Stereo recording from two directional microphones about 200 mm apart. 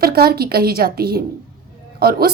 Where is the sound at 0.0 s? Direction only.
50° right (ahead or behind).